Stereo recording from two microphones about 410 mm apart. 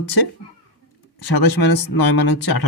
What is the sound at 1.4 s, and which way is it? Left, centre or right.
Speech, left.